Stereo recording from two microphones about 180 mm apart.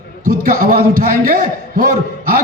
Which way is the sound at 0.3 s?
50° right (ahead or behind).